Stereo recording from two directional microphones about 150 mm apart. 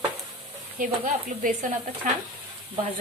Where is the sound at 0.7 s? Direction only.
65° right (ahead or behind).